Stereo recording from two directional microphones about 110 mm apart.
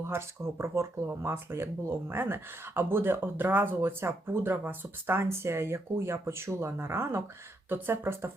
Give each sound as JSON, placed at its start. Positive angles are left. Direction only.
{"t": 0.0, "sound": "speech", "side_deg": -25}